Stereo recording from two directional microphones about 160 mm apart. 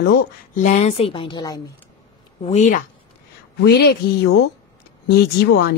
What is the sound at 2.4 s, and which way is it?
Speech, 50° left (ahead or behind).